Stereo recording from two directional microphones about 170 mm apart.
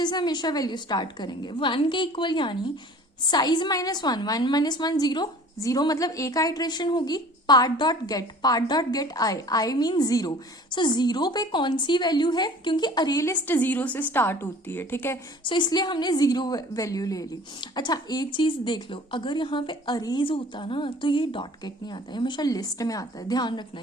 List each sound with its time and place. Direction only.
0.0 s a woman's voice: 25° left (ahead or behind)
15.4 s a woman's voice: 25° left (ahead or behind)